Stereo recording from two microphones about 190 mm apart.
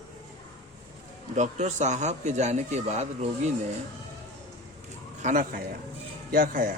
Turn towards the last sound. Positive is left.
turn(degrees=-45)  # may be behind; listen again after turning